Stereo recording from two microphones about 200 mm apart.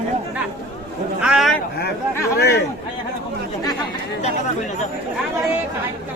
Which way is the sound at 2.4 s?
55° left (ahead or behind).